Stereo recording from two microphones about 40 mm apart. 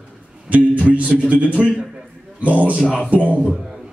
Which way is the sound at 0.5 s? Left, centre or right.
Right.